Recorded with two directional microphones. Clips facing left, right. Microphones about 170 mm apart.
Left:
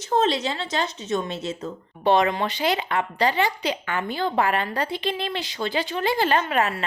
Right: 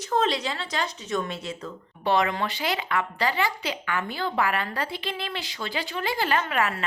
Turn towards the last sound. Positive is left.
turn(degrees=30)  # may be behind; listen again after turning